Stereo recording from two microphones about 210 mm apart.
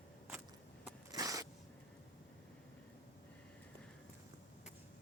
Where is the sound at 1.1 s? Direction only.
15° right (ahead or behind).